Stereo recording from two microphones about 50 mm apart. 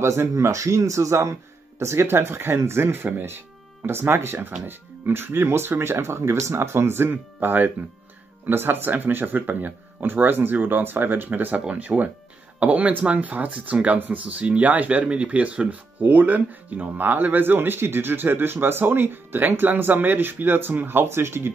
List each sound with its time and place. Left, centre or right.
0.0 s speech: right
1.8 s speech: right
7.3 s speech: right